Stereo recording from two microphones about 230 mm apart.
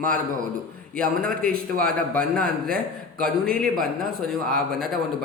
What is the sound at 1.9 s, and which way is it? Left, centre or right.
Speech, centre.